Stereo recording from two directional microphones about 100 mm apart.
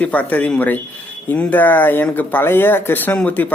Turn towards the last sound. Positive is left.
turn(degrees=15)  # may be behind; listen again after turning